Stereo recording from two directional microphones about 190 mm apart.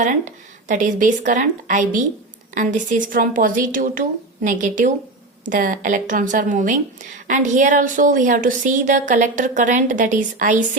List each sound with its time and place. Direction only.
0.0 s a woman's voice: 40° right (ahead or behind)